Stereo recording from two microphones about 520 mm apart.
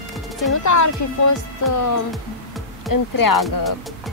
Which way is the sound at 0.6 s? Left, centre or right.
Left.